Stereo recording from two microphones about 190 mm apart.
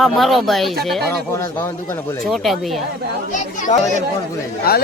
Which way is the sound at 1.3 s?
15° left (ahead or behind).